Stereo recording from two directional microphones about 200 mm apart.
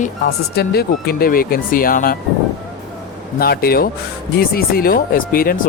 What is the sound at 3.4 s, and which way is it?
Speech, 50° left (ahead or behind).